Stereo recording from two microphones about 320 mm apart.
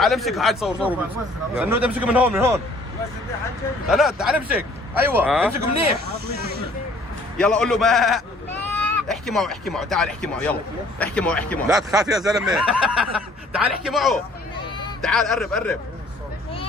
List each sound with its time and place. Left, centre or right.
0.0 s speech: centre
3.8 s speech: centre
7.3 s speech: centre
14.6 s a sound: centre
15.0 s speech: centre